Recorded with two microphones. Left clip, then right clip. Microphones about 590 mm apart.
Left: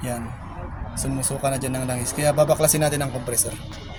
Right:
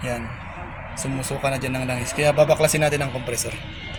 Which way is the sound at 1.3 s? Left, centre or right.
Left.